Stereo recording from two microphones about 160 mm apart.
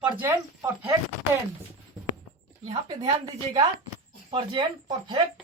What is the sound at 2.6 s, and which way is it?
Speech, 40° right (ahead or behind).